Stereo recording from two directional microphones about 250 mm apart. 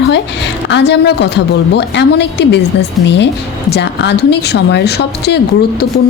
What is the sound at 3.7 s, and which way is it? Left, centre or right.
A woman's voice, left.